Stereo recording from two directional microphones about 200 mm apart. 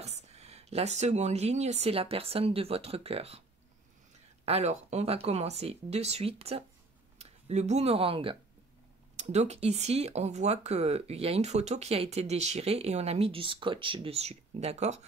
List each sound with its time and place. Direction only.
0.0 s speech: 35° right (ahead or behind)
4.5 s speech: 30° right (ahead or behind)